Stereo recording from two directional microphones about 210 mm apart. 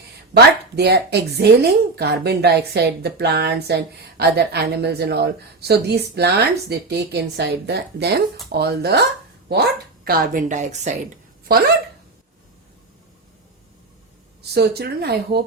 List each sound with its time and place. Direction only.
0.3 s speech: 50° right (ahead or behind); by 10.9 s 35° right (ahead or behind)
14.5 s speech: 50° right (ahead or behind)